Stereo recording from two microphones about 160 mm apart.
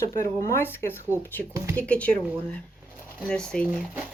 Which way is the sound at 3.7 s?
10° right (ahead or behind).